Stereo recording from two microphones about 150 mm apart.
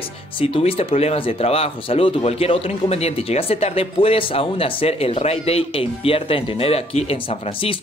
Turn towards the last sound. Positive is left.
turn(degrees=40)  # may be behind; listen again after turning